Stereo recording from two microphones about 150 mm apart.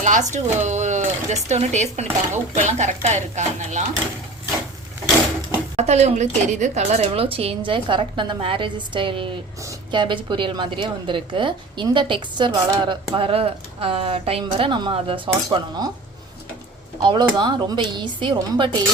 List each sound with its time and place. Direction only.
0.0 s speech: 55° right (ahead or behind)
5.7 s a woman's voice: 50° right (ahead or behind)
17.0 s a woman's voice: 30° right (ahead or behind)